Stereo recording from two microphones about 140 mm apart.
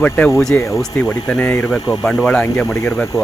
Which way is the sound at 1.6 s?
5° right (ahead or behind).